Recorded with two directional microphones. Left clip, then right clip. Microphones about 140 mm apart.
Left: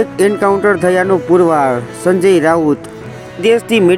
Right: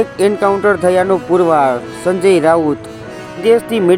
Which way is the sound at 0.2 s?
20° left (ahead or behind).